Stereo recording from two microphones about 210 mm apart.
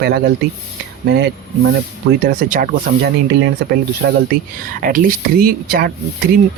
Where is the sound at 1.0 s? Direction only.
50° right (ahead or behind).